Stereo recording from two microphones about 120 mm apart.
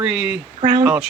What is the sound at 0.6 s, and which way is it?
Speech, 45° right (ahead or behind).